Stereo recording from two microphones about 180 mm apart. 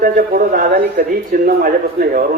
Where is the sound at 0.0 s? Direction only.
55° right (ahead or behind).